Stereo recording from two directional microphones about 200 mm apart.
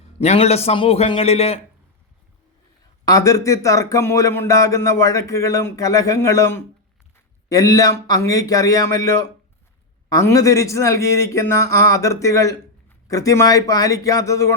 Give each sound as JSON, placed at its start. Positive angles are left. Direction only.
{"t": 0.2, "sound": "a man's voice", "side_deg": 30}
{"t": 3.0, "sound": "speech", "side_deg": 15}